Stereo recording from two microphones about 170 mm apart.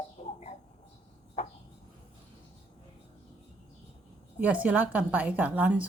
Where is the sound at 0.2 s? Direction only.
45° left (ahead or behind).